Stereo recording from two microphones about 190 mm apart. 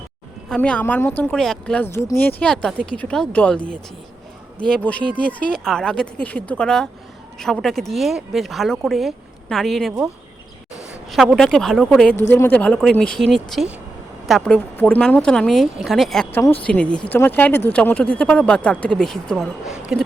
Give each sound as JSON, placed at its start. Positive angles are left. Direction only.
{"t": 0.5, "sound": "speech", "side_deg": 5}
{"t": 11.1, "sound": "speech", "side_deg": 0}